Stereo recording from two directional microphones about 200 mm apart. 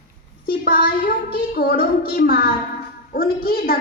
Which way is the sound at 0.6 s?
45° left (ahead or behind).